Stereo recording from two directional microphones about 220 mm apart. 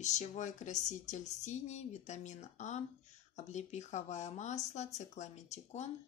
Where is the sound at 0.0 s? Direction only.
30° left (ahead or behind).